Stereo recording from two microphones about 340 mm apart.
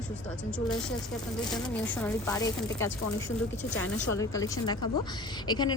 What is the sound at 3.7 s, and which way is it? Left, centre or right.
Speech, left.